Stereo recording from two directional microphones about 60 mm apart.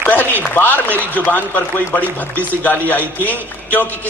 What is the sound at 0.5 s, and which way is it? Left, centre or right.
A man's voice, left.